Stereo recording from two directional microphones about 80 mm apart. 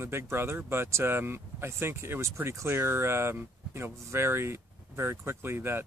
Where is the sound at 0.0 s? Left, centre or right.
Right.